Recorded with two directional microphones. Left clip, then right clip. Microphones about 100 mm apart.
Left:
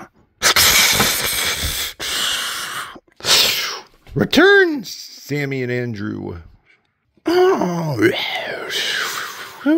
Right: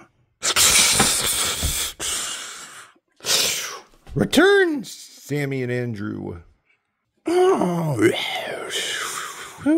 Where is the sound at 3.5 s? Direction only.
15° left (ahead or behind).